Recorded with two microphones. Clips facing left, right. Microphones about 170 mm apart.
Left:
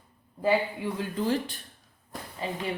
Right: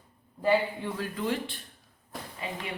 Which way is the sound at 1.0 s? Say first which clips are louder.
Left 3 dB; 35° left (ahead or behind).